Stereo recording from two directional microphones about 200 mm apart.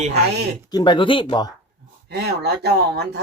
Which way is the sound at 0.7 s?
20° left (ahead or behind).